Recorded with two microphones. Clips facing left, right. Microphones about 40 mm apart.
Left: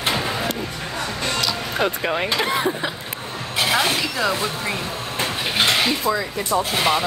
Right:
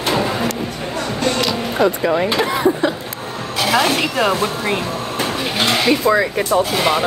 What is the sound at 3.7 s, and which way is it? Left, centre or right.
Speech, right.